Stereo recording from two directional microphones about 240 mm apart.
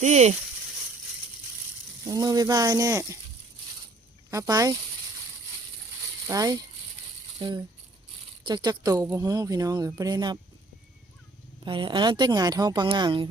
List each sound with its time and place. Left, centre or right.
0.0 s a woman's voice: right
2.0 s speech: centre
4.3 s speech: centre
6.2 s speech: centre
11.6 s a woman's voice: centre